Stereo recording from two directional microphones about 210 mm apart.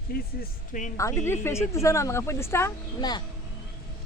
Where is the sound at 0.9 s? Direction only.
10° left (ahead or behind).